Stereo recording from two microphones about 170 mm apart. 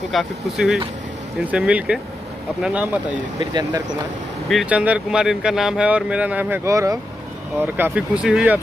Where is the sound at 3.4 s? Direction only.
25° right (ahead or behind).